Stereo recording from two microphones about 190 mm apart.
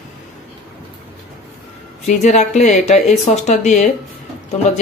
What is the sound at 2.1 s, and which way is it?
Speech, 40° left (ahead or behind).